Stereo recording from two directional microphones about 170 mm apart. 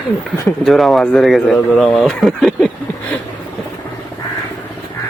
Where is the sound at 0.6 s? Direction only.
Centre (ahead or behind).